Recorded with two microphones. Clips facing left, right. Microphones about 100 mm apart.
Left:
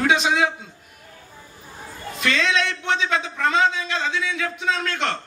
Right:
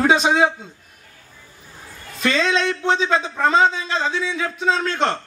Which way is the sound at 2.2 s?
30° right (ahead or behind).